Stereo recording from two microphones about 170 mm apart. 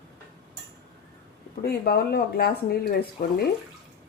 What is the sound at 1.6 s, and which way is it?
Speech, 65° left (ahead or behind).